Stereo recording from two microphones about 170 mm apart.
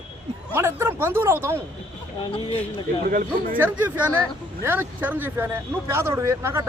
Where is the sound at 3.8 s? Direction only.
10° right (ahead or behind).